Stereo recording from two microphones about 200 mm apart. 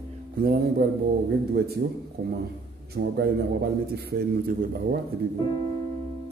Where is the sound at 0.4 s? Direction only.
50° right (ahead or behind).